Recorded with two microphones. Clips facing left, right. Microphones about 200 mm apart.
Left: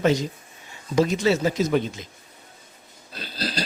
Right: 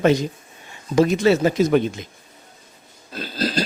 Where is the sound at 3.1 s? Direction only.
50° right (ahead or behind).